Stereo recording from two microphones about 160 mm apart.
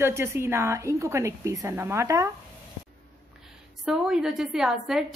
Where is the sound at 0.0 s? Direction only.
15° right (ahead or behind).